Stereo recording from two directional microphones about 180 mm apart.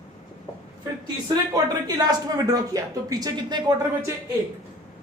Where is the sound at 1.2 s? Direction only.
20° right (ahead or behind).